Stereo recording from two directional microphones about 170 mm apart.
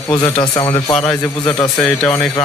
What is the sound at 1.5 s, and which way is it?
Speech, 20° left (ahead or behind).